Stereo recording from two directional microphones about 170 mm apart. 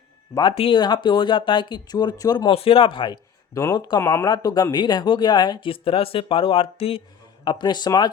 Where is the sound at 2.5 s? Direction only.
35° left (ahead or behind).